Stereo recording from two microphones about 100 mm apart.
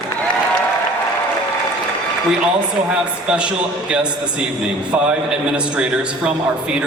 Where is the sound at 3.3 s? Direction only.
10° right (ahead or behind).